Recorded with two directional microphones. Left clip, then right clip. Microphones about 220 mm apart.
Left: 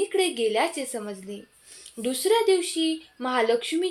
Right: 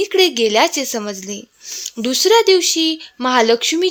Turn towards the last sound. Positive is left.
turn(degrees=-45)  # may be behind; listen again after turning